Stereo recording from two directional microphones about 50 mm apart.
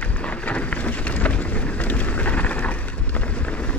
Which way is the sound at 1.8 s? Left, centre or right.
Left.